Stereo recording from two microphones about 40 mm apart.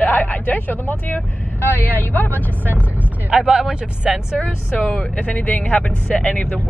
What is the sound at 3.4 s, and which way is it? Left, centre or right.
Speech, centre.